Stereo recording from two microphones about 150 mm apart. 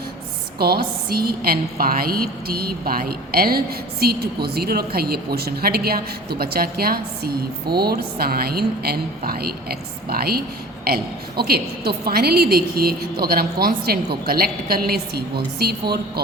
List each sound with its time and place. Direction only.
0.6 s a woman's voice: 90° right